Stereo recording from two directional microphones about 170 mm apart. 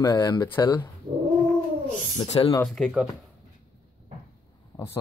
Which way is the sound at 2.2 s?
30° left (ahead or behind).